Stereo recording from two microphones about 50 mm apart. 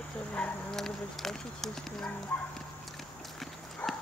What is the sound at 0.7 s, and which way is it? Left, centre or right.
Speech, centre.